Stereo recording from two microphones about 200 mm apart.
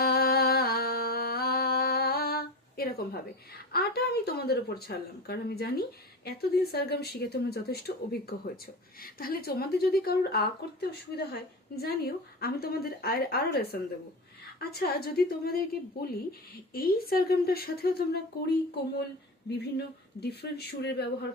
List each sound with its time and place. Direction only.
0.0 s music: 50° left (ahead or behind)
6.2 s speech: 50° left (ahead or behind)
20.4 s speech: 55° left (ahead or behind)